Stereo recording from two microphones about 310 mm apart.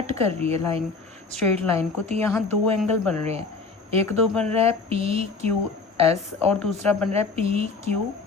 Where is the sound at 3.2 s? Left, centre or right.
Centre.